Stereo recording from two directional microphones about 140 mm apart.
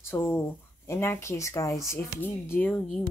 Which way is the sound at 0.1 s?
15° left (ahead or behind).